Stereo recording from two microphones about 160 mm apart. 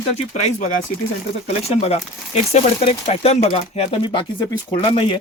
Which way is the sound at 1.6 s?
40° left (ahead or behind).